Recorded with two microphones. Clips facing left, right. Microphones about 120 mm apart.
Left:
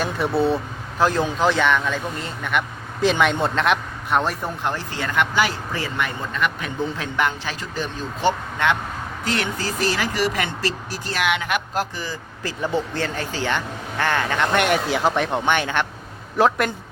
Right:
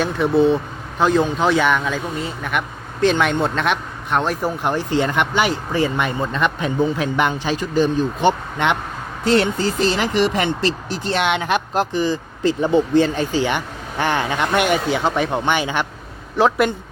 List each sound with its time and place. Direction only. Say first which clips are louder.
0.0 s speech: right 5 dB; 5° left (ahead or behind)
4.6 s speech: right 7 dB; 15° right (ahead or behind)
14.6 s speech: right 1 dB; centre (ahead or behind)